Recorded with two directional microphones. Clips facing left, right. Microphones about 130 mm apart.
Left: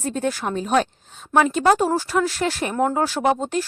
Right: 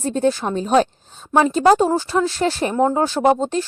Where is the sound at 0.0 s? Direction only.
30° right (ahead or behind).